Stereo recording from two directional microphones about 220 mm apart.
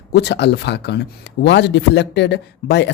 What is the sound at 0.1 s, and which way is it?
Speech, 50° left (ahead or behind).